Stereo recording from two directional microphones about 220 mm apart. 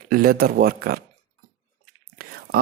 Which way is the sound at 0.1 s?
40° right (ahead or behind).